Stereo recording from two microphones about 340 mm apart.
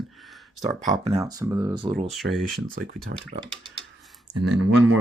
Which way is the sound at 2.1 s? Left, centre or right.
Centre.